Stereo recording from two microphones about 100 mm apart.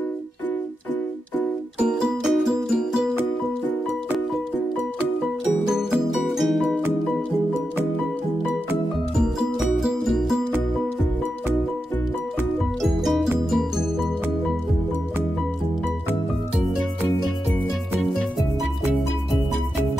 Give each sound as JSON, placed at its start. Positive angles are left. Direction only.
{"t": 1.9, "sound": "music", "side_deg": -5}
{"t": 5.7, "sound": "music", "side_deg": -5}
{"t": 12.8, "sound": "music", "side_deg": 0}